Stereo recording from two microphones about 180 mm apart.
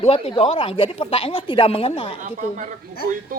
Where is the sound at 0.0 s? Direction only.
35° left (ahead or behind).